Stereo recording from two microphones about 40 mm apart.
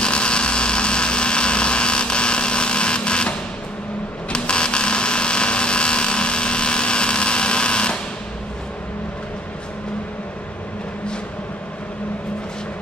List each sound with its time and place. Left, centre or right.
0.0 s hum: left